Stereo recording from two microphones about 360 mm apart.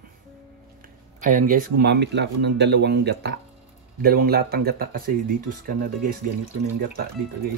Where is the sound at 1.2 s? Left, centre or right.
Right.